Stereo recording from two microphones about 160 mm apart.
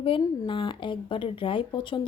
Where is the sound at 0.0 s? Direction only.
30° left (ahead or behind).